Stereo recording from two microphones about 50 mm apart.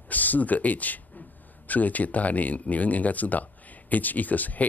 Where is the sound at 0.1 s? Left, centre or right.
Left.